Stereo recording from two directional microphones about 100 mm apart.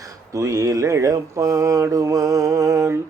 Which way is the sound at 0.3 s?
30° right (ahead or behind).